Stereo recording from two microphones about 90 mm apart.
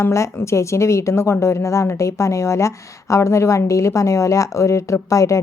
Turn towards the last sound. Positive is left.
turn(degrees=35)  # may be behind; listen again after turning